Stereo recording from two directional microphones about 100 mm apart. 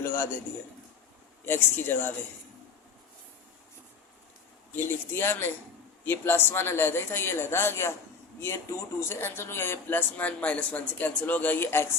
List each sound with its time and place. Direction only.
0.0 s a man's voice: 25° left (ahead or behind)
1.5 s speech: 20° left (ahead or behind)
4.7 s speech: 25° left (ahead or behind)